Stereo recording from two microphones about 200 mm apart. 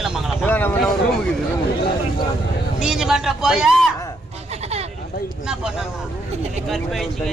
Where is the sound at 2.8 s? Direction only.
5° right (ahead or behind).